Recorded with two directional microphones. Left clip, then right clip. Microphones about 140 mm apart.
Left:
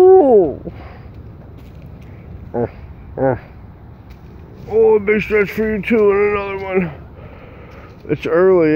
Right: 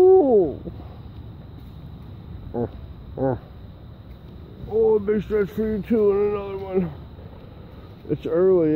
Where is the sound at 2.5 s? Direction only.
25° left (ahead or behind).